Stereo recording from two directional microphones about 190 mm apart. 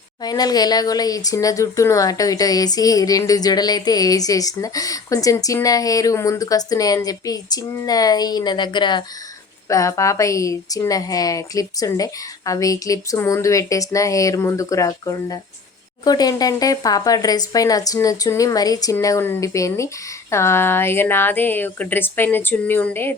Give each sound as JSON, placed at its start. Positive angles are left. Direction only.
{"t": 0.2, "sound": "a woman's voice", "side_deg": 20}